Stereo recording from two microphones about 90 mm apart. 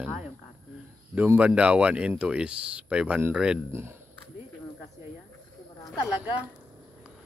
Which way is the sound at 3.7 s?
30° right (ahead or behind).